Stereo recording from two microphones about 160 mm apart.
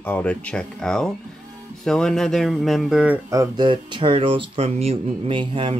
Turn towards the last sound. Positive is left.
turn(degrees=-30)  # may be behind; listen again after turning